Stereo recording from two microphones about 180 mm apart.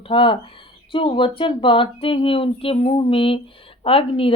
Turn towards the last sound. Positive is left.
turn(degrees=30)  # may be behind; listen again after turning